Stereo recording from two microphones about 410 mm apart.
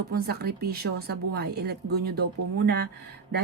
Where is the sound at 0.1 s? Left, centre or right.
Right.